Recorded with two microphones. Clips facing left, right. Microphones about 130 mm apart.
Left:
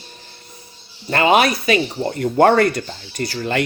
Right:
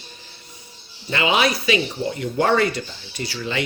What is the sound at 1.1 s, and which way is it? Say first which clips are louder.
Speech: left 5 dB; 50° left (ahead or behind).